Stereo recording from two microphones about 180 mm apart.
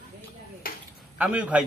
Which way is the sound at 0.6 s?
55° left (ahead or behind).